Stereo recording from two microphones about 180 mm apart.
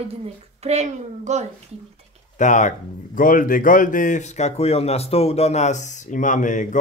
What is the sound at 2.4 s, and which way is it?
Speech, 45° left (ahead or behind).